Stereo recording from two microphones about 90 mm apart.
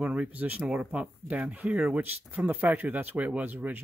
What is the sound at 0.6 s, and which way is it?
Speech, 5° right (ahead or behind).